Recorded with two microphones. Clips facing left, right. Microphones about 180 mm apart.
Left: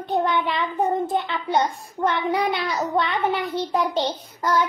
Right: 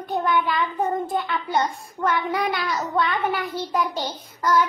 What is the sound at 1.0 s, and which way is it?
A child's voice, 25° left (ahead or behind).